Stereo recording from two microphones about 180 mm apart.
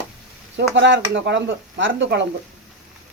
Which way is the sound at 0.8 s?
90° right.